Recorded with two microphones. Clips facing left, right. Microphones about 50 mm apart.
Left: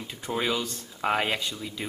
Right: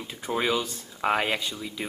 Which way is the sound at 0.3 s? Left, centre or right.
Centre.